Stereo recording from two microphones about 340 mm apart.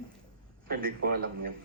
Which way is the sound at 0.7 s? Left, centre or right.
Right.